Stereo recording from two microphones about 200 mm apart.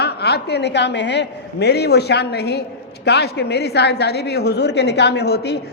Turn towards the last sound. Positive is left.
turn(degrees=55)  # may be behind; listen again after turning